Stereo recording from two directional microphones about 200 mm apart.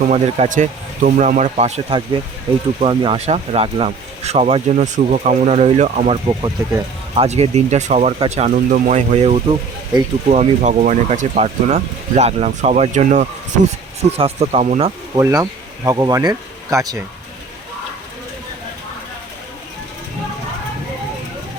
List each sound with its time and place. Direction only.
0.1 s speech: 40° right (ahead or behind)
7.2 s speech: 30° right (ahead or behind)
15.1 s speech: 15° right (ahead or behind)